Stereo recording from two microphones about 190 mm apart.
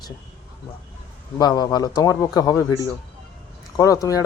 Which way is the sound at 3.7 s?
20° left (ahead or behind).